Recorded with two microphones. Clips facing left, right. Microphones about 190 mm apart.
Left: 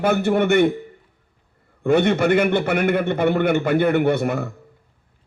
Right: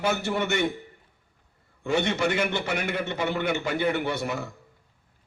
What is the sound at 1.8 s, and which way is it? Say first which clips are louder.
A man's voice: left 8 dB; 55° left (ahead or behind).